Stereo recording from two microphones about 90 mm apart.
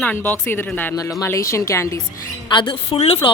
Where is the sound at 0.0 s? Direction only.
20° left (ahead or behind).